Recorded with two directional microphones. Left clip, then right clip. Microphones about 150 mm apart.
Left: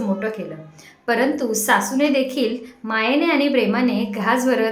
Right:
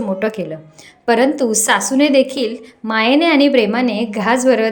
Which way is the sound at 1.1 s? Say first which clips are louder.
Right 6 dB; 35° right (ahead or behind).